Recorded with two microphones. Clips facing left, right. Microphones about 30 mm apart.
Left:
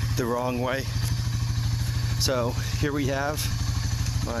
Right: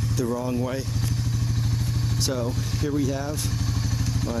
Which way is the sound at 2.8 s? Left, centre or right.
Left.